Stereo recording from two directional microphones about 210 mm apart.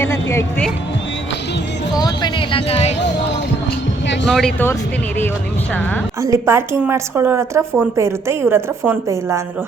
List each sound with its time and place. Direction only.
0.0 s music: 10° left (ahead or behind)
2.0 s a sound: 20° left (ahead or behind)
4.3 s speech: 5° left (ahead or behind)
6.2 s a woman's voice: 15° right (ahead or behind)